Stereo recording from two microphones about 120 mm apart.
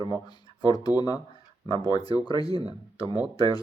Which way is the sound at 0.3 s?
35° left (ahead or behind).